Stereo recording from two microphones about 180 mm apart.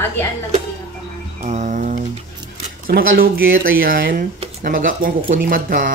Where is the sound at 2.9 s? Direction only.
55° right (ahead or behind).